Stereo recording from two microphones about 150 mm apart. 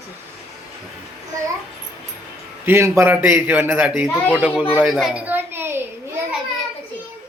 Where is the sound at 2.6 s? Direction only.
15° right (ahead or behind).